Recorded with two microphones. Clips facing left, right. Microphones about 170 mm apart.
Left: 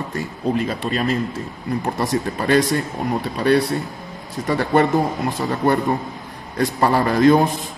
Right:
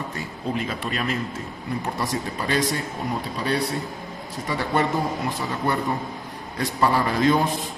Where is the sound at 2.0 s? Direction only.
55° left (ahead or behind).